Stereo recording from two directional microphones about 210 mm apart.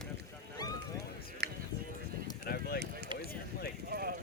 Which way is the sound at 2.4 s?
45° left (ahead or behind).